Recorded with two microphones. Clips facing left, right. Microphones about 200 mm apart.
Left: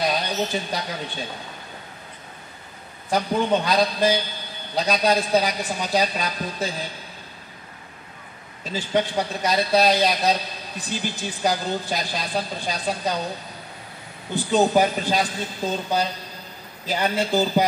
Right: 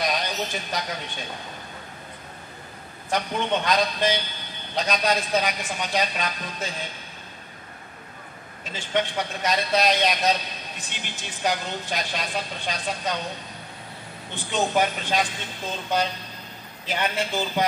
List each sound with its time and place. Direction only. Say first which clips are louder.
0.0 s speech: left 3 dB; 30° left (ahead or behind)
3.1 s a woman's voice: left 4 dB; 35° left (ahead or behind)
8.7 s a woman's voice: left 3 dB; 35° left (ahead or behind)
14.3 s a woman's voice: left 6 dB; 35° left (ahead or behind)